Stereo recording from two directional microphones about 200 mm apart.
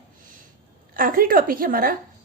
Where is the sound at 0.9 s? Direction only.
45° right (ahead or behind).